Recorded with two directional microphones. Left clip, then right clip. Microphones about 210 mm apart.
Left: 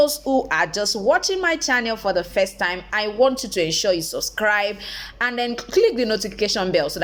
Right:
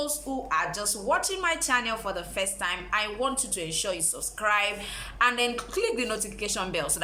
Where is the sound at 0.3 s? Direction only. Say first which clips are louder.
Left 8 dB; 35° left (ahead or behind).